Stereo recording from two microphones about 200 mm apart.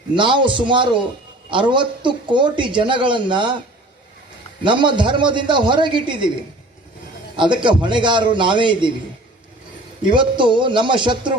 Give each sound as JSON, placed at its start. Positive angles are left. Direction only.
{"t": 0.1, "sound": "speech", "side_deg": -25}
{"t": 4.6, "sound": "speech", "side_deg": -25}
{"t": 7.3, "sound": "speech", "side_deg": -25}
{"t": 10.0, "sound": "speech", "side_deg": -25}